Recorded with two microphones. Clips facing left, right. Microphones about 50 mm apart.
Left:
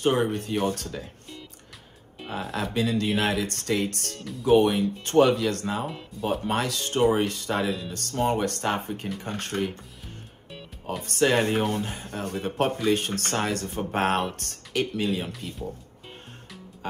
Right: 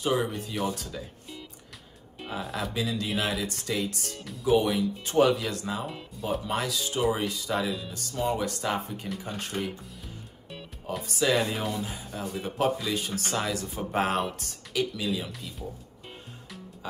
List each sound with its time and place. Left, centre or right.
0.0 s speech: left
2.2 s music: centre
2.5 s speech: left
4.2 s speech: centre
4.5 s speech: left
5.9 s speech: centre
6.4 s speech: left
10.5 s music: centre
11.1 s speech: left